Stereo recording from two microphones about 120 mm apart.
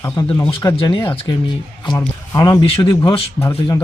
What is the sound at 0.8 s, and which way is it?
Speech, 45° left (ahead or behind).